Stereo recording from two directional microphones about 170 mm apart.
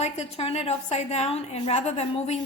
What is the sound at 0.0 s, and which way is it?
A woman's voice, 40° left (ahead or behind).